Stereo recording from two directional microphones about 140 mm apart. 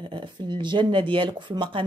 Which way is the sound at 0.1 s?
35° right (ahead or behind).